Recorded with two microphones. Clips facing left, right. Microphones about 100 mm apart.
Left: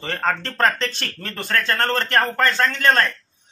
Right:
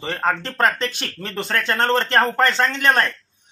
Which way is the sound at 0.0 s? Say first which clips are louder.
Right 1 dB; 15° right (ahead or behind).